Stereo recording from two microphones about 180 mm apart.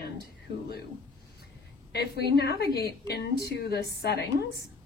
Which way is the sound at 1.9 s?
60° left (ahead or behind).